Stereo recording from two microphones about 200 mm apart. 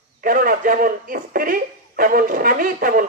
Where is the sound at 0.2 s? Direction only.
45° right (ahead or behind).